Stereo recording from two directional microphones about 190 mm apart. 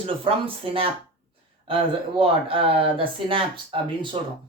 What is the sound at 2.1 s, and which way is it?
Speech, 30° right (ahead or behind).